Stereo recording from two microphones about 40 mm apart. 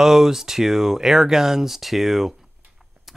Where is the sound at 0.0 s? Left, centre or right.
Centre.